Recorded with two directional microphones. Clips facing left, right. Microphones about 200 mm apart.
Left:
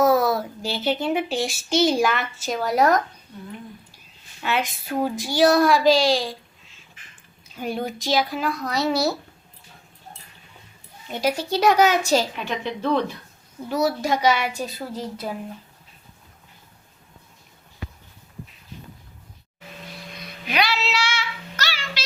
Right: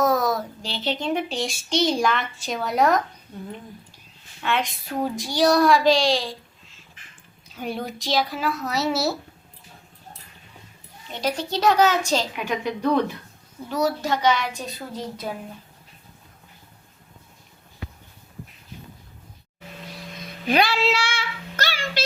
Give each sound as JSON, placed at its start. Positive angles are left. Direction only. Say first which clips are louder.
{"t": 0.0, "sound": "a child's voice", "louder": "left 3 dB", "side_deg": 5}
{"t": 4.4, "sound": "a child's voice", "louder": "even", "side_deg": 5}
{"t": 11.1, "sound": "a child's voice", "louder": "left 3 dB", "side_deg": 10}
{"t": 12.4, "sound": "a woman's voice", "louder": "right 2 dB", "side_deg": -10}
{"t": 13.7, "sound": "a child's voice", "louder": "left 1 dB", "side_deg": 10}
{"t": 20.5, "sound": "child singing", "louder": "right 4 dB", "side_deg": -50}